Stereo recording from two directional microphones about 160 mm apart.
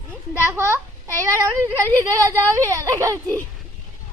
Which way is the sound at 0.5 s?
15° right (ahead or behind).